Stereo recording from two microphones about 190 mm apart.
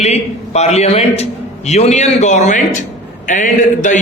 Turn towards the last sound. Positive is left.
turn(degrees=40)  # may be behind; listen again after turning